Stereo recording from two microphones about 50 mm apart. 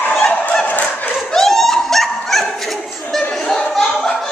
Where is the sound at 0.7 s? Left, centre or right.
Left.